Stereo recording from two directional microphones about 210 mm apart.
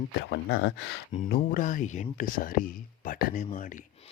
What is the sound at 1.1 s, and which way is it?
Speech, 35° left (ahead or behind).